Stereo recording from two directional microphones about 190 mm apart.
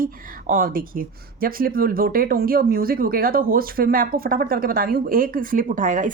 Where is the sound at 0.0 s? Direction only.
50° right (ahead or behind).